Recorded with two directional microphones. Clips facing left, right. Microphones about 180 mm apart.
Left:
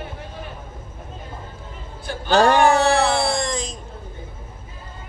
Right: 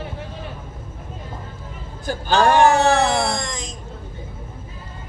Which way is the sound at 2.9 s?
30° left (ahead or behind).